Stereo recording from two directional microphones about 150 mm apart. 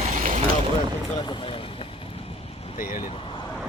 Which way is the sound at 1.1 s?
30° left (ahead or behind).